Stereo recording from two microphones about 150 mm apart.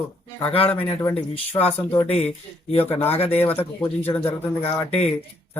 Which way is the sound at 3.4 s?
15° left (ahead or behind).